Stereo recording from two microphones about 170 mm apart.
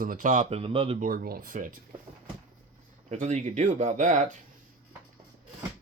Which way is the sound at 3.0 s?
45° right (ahead or behind).